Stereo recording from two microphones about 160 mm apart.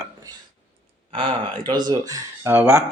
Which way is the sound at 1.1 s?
30° right (ahead or behind).